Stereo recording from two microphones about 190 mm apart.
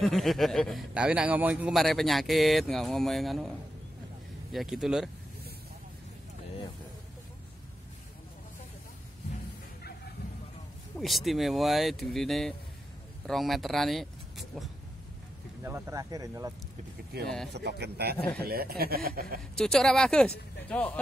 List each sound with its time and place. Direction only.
0.0 s a man's voice: centre (ahead or behind)
11.0 s a man's voice: centre (ahead or behind)
15.6 s speech: 15° right (ahead or behind)
17.6 s speech: 60° right (ahead or behind)
19.5 s a man's voice: centre (ahead or behind)